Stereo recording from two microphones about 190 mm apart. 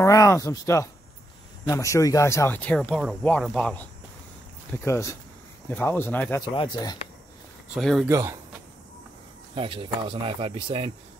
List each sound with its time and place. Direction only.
0.0 s speech: 15° left (ahead or behind)
4.8 s speech: 15° left (ahead or behind)
6.4 s speech: 25° left (ahead or behind)
7.7 s speech: centre (ahead or behind)
8.1 s speech: 15° right (ahead or behind)
9.6 s speech: 25° right (ahead or behind)